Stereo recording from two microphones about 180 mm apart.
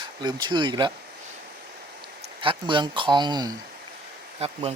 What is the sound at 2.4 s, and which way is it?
Speech, 25° right (ahead or behind).